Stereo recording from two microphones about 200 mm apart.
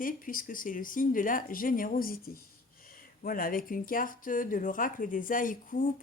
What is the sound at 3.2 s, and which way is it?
Speech, 45° left (ahead or behind).